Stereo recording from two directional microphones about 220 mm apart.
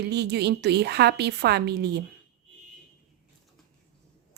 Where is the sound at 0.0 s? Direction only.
50° right (ahead or behind).